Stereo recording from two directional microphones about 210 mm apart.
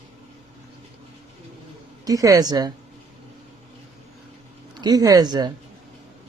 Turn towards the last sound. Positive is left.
turn(degrees=-20)  # may be behind; listen again after turning